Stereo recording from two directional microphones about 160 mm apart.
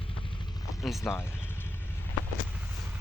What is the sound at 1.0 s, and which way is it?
Speech, 15° left (ahead or behind).